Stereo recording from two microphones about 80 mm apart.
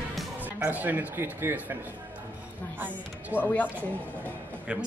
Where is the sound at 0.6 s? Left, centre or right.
Right.